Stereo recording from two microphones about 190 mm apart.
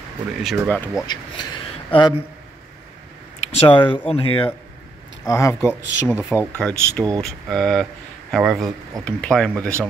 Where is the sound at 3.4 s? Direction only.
30° left (ahead or behind).